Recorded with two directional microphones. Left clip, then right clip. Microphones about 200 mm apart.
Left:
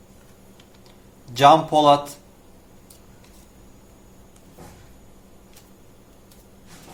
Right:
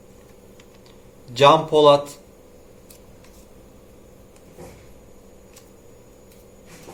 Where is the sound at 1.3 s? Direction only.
50° left (ahead or behind).